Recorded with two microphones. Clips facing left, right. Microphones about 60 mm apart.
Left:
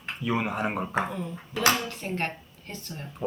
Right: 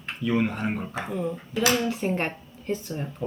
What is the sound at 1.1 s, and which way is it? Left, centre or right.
Speech, centre.